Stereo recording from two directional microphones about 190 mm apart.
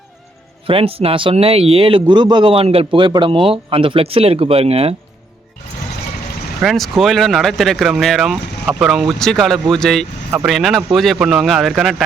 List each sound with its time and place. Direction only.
0.7 s a man's voice: 30° right (ahead or behind)
6.6 s speech: centre (ahead or behind)